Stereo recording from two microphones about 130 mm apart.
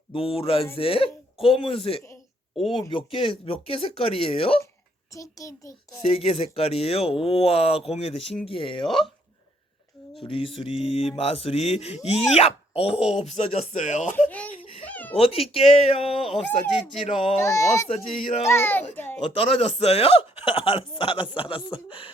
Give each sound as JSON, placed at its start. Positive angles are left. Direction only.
{"t": 0.1, "sound": "speech", "side_deg": 45}
{"t": 5.1, "sound": "a child's voice", "side_deg": 25}
{"t": 6.0, "sound": "speech", "side_deg": 45}
{"t": 10.2, "sound": "speech", "side_deg": 40}
{"t": 14.3, "sound": "speech", "side_deg": 10}
{"t": 14.8, "sound": "cat", "side_deg": 15}
{"t": 15.1, "sound": "speech", "side_deg": 50}
{"t": 17.4, "sound": "a child's voice", "side_deg": 25}
{"t": 17.8, "sound": "speech", "side_deg": 50}
{"t": 18.4, "sound": "a child's voice", "side_deg": 20}
{"t": 19.4, "sound": "speech", "side_deg": 50}